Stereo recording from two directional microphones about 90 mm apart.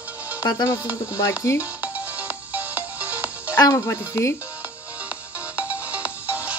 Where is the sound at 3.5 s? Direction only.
35° left (ahead or behind).